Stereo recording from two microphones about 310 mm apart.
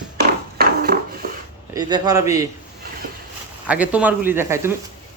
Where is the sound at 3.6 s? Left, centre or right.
Centre.